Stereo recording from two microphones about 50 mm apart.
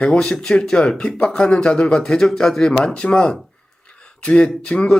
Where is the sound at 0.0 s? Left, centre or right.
Centre.